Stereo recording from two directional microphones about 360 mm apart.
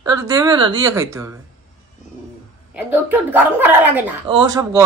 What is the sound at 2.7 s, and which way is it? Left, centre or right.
Speech, centre.